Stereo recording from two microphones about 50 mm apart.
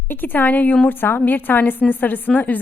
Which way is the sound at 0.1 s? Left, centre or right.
Left.